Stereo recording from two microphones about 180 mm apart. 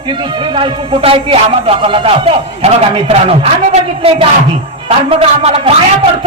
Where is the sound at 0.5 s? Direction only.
30° right (ahead or behind).